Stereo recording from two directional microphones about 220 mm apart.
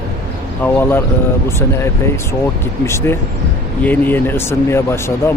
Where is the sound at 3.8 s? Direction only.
10° left (ahead or behind).